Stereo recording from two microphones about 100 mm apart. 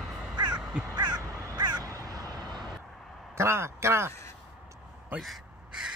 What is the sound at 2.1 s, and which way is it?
Vehicle, 40° right (ahead or behind).